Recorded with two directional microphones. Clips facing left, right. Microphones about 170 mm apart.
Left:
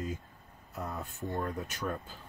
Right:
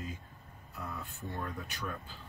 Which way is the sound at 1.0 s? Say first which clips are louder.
Left 7 dB; 45° left (ahead or behind).